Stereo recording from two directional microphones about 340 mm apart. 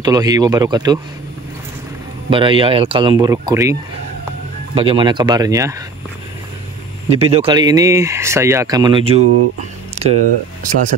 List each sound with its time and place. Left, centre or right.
0.0 s speech: centre
2.2 s speech: centre
4.7 s speech: centre
7.1 s speech: centre
9.9 s a sound: centre